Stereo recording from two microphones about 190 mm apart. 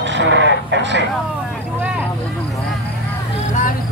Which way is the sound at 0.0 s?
70° right (ahead or behind).